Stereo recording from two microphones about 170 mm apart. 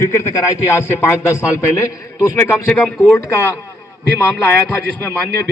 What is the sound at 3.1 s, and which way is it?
Speech, 15° left (ahead or behind).